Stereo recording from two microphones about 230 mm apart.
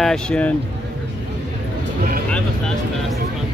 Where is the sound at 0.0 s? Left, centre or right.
Centre.